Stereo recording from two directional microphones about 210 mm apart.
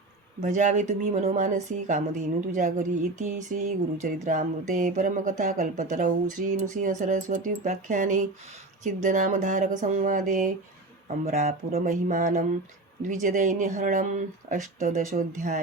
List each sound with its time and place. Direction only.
0.4 s speech: 35° right (ahead or behind)